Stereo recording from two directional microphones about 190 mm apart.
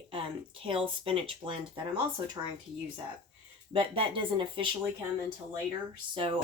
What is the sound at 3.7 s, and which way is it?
Speech, 25° right (ahead or behind).